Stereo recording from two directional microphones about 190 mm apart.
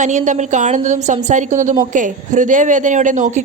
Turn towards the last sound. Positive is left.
turn(degrees=-40)  # may be behind; listen again after turning